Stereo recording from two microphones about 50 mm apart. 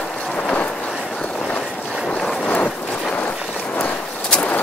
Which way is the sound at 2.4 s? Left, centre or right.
Left.